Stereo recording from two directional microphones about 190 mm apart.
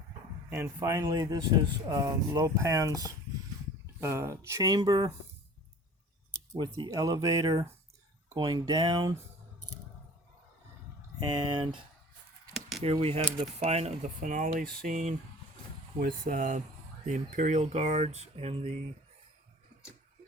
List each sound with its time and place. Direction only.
0.5 s speech: 15° right (ahead or behind)
6.5 s speech: 20° right (ahead or behind)
11.2 s speech: 20° right (ahead or behind)
12.8 s speech: 30° right (ahead or behind)